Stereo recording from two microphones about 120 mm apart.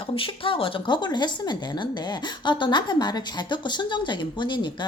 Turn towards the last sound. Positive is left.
turn(degrees=40)  # may be behind; listen again after turning